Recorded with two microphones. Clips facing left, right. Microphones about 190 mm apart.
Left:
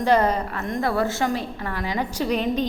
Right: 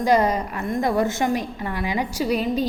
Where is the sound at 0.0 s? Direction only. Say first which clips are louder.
Right 1 dB; 10° right (ahead or behind).